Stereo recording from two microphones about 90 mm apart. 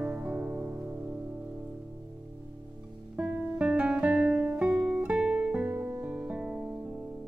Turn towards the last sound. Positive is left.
turn(degrees=-10)  # may be behind; listen again after turning